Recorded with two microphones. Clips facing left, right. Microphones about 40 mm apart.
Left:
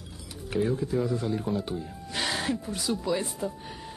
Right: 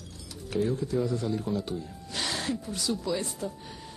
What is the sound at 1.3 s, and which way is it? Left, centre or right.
Speech, centre.